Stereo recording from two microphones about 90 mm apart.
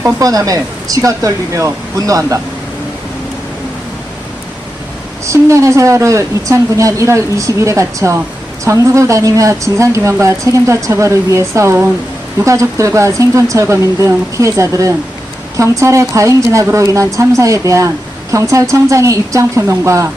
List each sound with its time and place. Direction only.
0.0 s speech: 40° right (ahead or behind)
5.2 s speech: 35° right (ahead or behind)